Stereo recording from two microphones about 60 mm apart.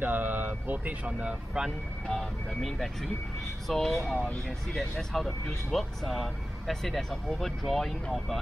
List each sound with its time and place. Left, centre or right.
0.0 s speech: right
2.0 s speech: centre